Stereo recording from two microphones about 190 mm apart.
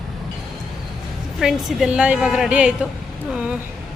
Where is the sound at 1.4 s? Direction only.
Centre (ahead or behind).